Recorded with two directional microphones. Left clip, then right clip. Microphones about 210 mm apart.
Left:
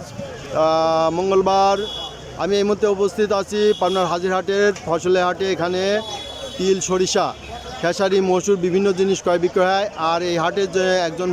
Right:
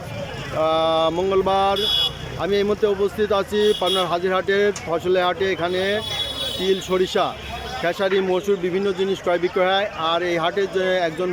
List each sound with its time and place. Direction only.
0.5 s speech: 10° left (ahead or behind)